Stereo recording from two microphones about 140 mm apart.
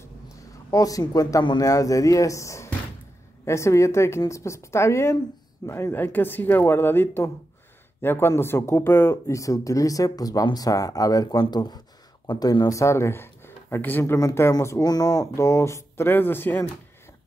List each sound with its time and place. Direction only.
0.0 s speech: 25° left (ahead or behind)